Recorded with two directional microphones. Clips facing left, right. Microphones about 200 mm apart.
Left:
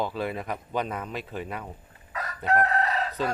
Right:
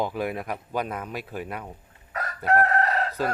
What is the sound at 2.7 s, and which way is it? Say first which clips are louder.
Chicken: right 2 dB; 55° right (ahead or behind).